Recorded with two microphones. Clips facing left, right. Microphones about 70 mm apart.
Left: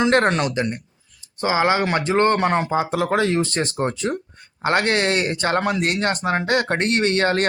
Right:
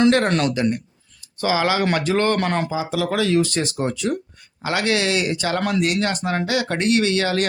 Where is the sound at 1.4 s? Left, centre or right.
Left.